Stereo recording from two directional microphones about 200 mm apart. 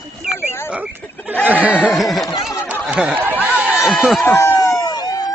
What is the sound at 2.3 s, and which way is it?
Chatter, 15° left (ahead or behind).